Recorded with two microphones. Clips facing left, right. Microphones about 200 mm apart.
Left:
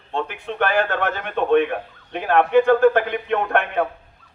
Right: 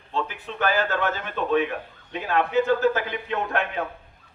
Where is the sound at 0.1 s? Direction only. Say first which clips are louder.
Left 3 dB; 55° left (ahead or behind).